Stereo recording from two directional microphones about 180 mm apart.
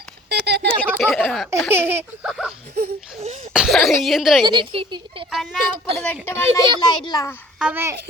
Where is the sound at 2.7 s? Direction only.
60° right (ahead or behind).